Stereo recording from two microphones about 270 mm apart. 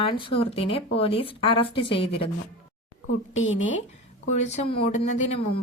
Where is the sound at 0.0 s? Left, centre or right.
Centre.